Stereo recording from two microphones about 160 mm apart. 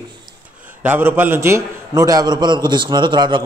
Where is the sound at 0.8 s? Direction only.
10° right (ahead or behind).